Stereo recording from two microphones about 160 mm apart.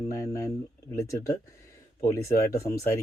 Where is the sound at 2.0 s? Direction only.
20° left (ahead or behind).